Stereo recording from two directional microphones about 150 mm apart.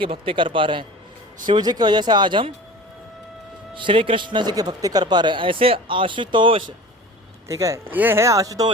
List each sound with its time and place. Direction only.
0.0 s speech: 35° right (ahead or behind)
3.8 s speech: 35° right (ahead or behind)
7.4 s speech: 20° right (ahead or behind)